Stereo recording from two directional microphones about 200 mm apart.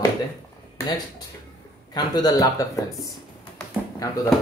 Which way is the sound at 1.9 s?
20° left (ahead or behind).